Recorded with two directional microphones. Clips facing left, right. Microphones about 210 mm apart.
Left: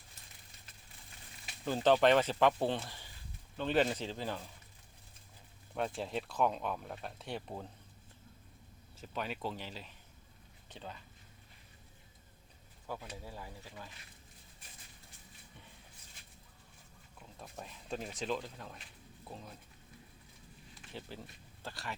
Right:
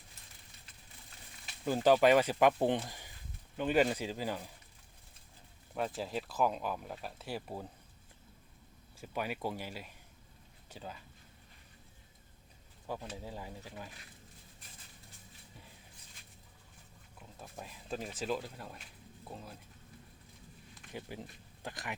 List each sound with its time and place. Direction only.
1.6 s speech: 10° right (ahead or behind)
5.7 s speech: 5° right (ahead or behind)
9.0 s speech: 10° right (ahead or behind)
13.2 s speech: 15° right (ahead or behind)
17.2 s speech: 5° right (ahead or behind)
20.9 s speech: 15° right (ahead or behind)